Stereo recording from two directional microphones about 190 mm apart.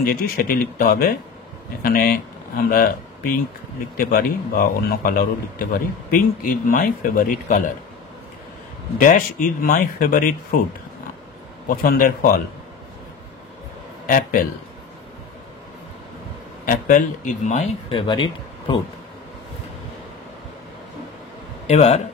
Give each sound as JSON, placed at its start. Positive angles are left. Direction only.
{"t": 0.0, "sound": "a man's voice", "side_deg": 50}
{"t": 8.9, "sound": "a man's voice", "side_deg": 45}
{"t": 11.6, "sound": "a man's voice", "side_deg": 50}
{"t": 14.0, "sound": "a man's voice", "side_deg": 50}
{"t": 16.6, "sound": "a man's voice", "side_deg": 45}
{"t": 17.9, "sound": "speech", "side_deg": 25}
{"t": 21.6, "sound": "a man's voice", "side_deg": 35}